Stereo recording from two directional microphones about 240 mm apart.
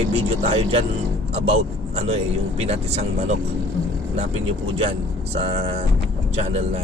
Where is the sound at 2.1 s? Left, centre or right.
Right.